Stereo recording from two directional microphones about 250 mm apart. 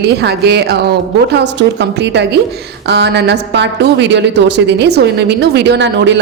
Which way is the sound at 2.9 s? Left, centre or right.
Right.